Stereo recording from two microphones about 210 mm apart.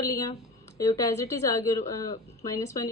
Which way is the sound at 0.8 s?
15° left (ahead or behind).